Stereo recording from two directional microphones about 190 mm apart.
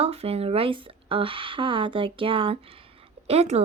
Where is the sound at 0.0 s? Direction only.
30° right (ahead or behind).